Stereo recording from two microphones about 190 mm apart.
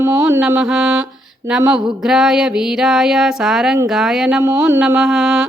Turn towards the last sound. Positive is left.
turn(degrees=-5)  # may be behind; listen again after turning